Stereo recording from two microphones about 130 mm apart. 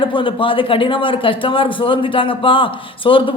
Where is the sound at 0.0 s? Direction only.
40° left (ahead or behind).